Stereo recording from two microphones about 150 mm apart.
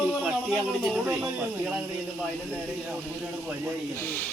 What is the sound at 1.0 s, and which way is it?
Speech, 15° right (ahead or behind).